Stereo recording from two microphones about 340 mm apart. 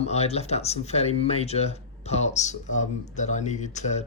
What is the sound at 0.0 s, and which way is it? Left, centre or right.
Speech, centre.